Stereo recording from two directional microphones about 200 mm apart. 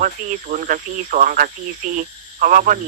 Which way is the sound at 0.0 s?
40° right (ahead or behind).